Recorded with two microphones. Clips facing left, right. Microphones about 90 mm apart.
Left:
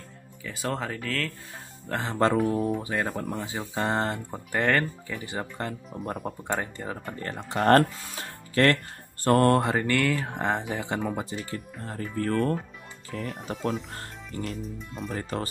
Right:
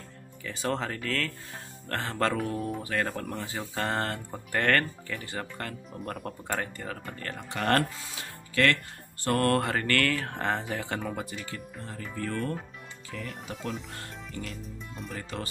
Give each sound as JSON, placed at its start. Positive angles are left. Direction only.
{"t": 0.4, "sound": "speech", "side_deg": 0}
{"t": 1.9, "sound": "speech", "side_deg": 15}
{"t": 2.3, "sound": "speech", "side_deg": 0}
{"t": 2.8, "sound": "speech", "side_deg": 15}
{"t": 5.9, "sound": "speech", "side_deg": 0}
{"t": 6.4, "sound": "speech", "side_deg": 20}
{"t": 9.4, "sound": "speech", "side_deg": 20}
{"t": 11.2, "sound": "speech", "side_deg": 35}
{"t": 14.6, "sound": "speech", "side_deg": 0}
{"t": 15.1, "sound": "speech", "side_deg": 40}